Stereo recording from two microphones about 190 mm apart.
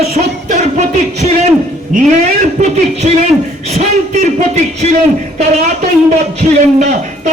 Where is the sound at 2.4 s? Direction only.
35° right (ahead or behind).